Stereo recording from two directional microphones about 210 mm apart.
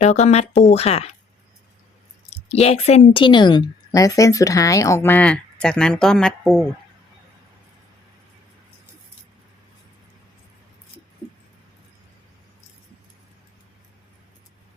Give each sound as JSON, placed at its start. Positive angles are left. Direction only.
{"t": 0.0, "sound": "speech", "side_deg": 35}
{"t": 2.3, "sound": "a woman's voice", "side_deg": 30}